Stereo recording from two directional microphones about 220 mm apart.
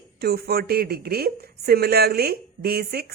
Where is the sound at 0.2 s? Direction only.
45° right (ahead or behind).